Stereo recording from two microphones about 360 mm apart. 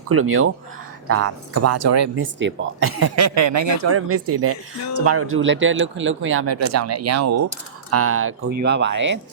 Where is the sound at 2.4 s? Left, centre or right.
Right.